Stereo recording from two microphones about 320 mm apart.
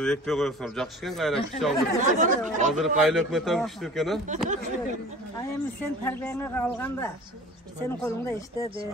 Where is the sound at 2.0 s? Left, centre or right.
Right.